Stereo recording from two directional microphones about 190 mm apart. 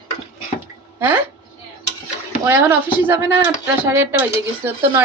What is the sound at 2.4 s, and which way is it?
Speech, 10° right (ahead or behind).